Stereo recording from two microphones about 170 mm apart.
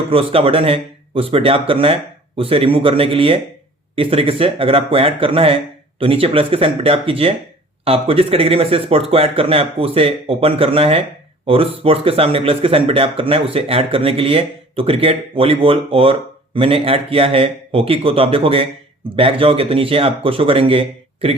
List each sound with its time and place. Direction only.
0.1 s speech: 35° right (ahead or behind)